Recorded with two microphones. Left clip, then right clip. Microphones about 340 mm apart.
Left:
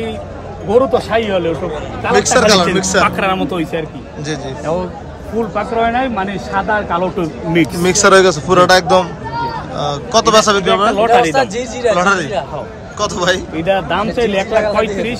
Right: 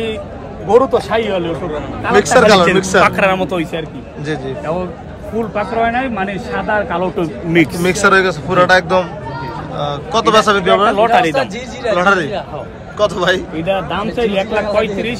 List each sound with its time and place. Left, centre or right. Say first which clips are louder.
0.7 s a man's voice: right 1 dB; centre
11.3 s a man's voice: left 3 dB; left
11.9 s a man's voice: right 1 dB; centre
14.2 s a man's voice: left 1 dB; left